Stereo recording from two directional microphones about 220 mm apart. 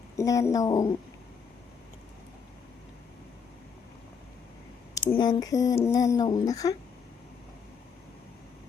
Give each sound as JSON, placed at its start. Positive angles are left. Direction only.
{"t": 0.2, "sound": "speech", "side_deg": 15}
{"t": 5.1, "sound": "speech", "side_deg": 20}